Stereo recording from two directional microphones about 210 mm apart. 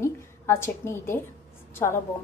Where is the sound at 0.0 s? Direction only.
10° left (ahead or behind).